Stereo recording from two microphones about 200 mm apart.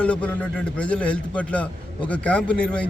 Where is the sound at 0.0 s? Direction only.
5° left (ahead or behind).